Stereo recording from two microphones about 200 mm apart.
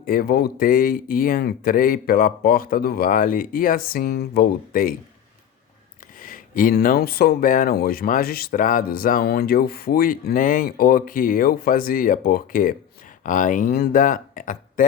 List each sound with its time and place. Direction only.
0.0 s speech: 45° left (ahead or behind)
6.1 s speech: 45° left (ahead or behind)